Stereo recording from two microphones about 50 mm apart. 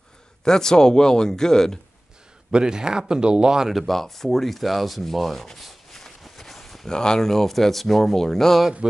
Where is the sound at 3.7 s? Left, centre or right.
Centre.